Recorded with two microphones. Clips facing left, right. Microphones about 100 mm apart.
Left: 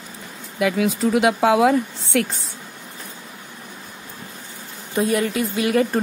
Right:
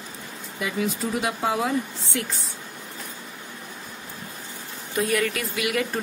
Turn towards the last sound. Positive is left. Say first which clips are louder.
# left 7 dB
turn(degrees=35)  # may be behind; listen again after turning